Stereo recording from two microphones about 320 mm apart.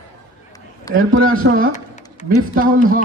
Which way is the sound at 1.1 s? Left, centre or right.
Right.